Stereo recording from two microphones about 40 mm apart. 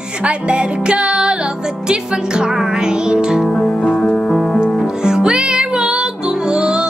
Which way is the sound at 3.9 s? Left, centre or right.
Centre.